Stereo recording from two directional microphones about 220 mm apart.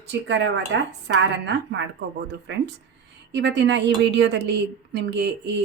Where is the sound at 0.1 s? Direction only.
55° right (ahead or behind).